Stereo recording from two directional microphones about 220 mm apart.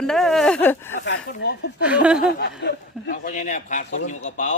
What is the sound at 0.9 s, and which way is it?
Speech, 55° left (ahead or behind).